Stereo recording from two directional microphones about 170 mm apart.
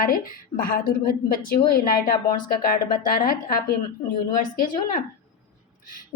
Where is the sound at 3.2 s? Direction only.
60° left (ahead or behind).